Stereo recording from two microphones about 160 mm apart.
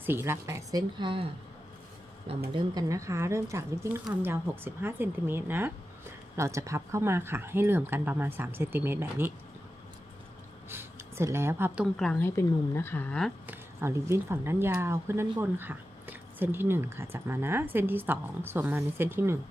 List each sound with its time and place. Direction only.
0.0 s speech: 15° right (ahead or behind); by 1.3 s 30° right (ahead or behind)
2.5 s speech: 20° right (ahead or behind)
10.7 s speech: 15° right (ahead or behind)
11.9 s speech: 5° left (ahead or behind)
12.4 s speech: 15° left (ahead or behind)
13.5 s speech: 15° right (ahead or behind)